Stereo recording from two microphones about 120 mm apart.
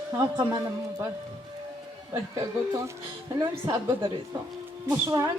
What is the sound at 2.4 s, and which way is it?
A woman's voice, 25° right (ahead or behind).